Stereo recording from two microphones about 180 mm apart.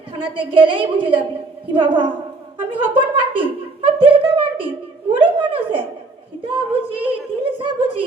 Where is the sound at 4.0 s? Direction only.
30° right (ahead or behind).